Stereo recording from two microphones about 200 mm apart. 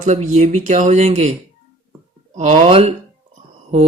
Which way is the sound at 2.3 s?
35° right (ahead or behind).